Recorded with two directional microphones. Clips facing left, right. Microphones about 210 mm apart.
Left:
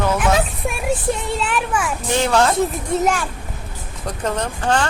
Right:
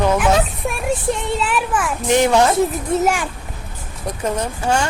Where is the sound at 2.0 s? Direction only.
15° right (ahead or behind).